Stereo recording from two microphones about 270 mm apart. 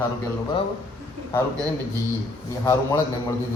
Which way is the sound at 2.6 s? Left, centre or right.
Centre.